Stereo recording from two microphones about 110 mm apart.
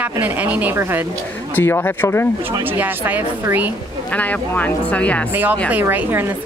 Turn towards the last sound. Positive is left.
turn(degrees=-15)  # may be behind; listen again after turning